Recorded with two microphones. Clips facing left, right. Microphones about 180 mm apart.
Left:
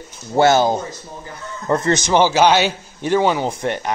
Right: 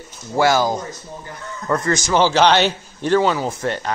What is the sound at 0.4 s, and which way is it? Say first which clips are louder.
A man's voice: left 3 dB; 25° left (ahead or behind).